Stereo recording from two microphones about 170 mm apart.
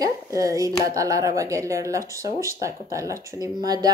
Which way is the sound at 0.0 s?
20° right (ahead or behind).